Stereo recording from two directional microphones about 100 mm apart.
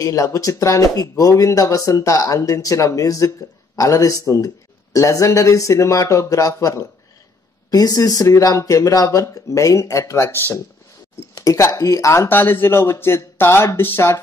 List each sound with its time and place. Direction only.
0.0 s speech: 35° left (ahead or behind)